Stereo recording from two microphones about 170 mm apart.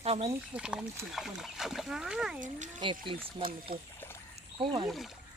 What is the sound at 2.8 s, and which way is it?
Speech, 30° right (ahead or behind).